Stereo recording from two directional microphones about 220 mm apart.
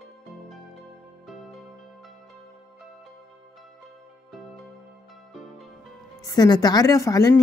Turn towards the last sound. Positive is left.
turn(degrees=15)  # may be behind; listen again after turning